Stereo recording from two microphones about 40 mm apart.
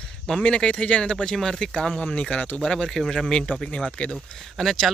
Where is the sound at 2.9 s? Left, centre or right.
Centre; by 4.2 s left.